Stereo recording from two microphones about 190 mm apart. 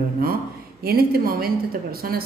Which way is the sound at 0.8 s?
55° right (ahead or behind).